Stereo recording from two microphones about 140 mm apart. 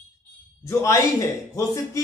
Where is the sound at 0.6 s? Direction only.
20° left (ahead or behind).